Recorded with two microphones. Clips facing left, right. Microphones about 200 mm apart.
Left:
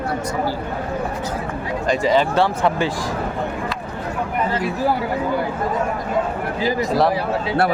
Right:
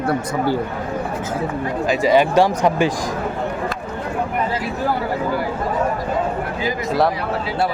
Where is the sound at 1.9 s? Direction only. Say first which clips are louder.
Right 2 dB; 10° right (ahead or behind).